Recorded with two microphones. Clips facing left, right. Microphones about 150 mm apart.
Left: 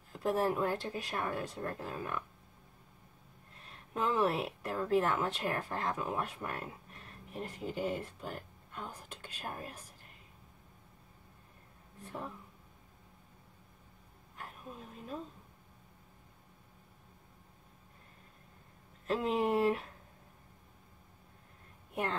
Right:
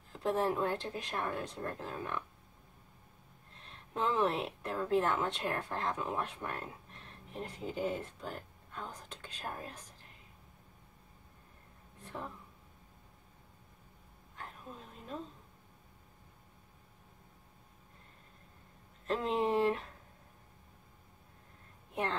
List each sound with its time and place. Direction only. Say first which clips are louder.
0.1 s speech: left 1 dB; 10° left (ahead or behind)
3.6 s speech: even; 5° left (ahead or behind)
19.0 s speech: left 1 dB; 5° left (ahead or behind)